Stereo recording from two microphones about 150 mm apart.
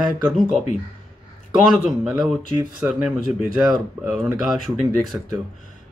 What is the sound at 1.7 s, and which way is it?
Speech, 5° right (ahead or behind).